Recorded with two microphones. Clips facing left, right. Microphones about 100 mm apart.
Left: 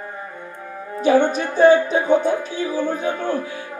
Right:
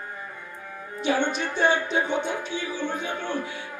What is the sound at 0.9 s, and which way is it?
Music, 40° left (ahead or behind).